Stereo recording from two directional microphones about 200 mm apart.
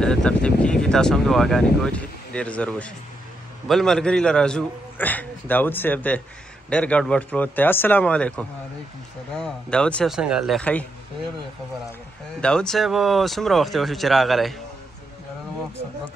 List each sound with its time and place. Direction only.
0.0 s speech: 5° left (ahead or behind)
12.4 s speech: 5° left (ahead or behind)